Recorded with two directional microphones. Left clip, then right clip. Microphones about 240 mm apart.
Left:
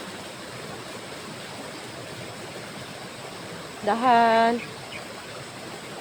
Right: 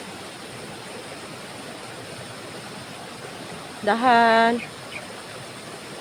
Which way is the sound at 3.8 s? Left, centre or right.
Centre.